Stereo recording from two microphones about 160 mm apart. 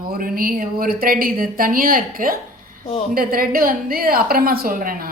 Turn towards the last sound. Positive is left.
turn(degrees=-65)  # may be behind; listen again after turning